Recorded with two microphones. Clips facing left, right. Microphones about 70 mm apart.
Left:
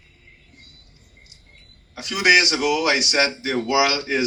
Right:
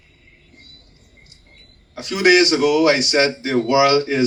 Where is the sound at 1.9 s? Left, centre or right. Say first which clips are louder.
Right 3 dB; right.